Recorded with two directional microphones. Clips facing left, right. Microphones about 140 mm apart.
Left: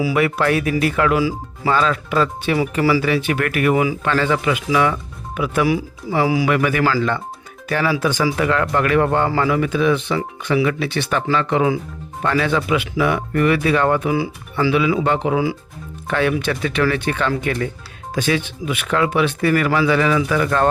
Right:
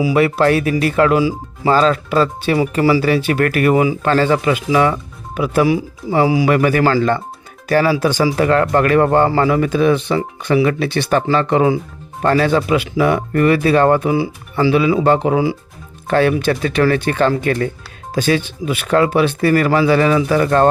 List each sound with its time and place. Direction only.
0.1 s a man's voice: 30° right (ahead or behind)
6.5 s a man's voice: 35° right (ahead or behind)